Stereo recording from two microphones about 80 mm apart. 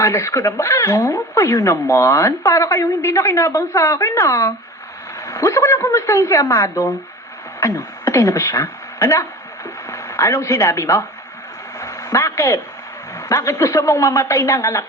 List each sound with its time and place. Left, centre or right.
0.0 s speech: left
11.8 s a sound: left
13.1 s speech: left